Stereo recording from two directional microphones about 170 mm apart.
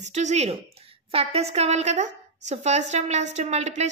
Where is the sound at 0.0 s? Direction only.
45° right (ahead or behind).